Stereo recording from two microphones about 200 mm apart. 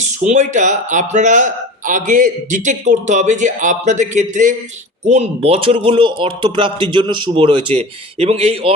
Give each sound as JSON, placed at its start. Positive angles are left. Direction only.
{"t": 0.0, "sound": "a man's voice", "side_deg": -35}